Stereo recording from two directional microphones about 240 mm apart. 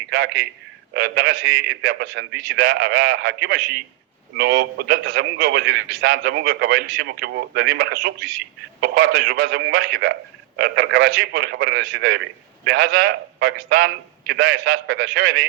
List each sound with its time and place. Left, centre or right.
0.1 s a man's voice: right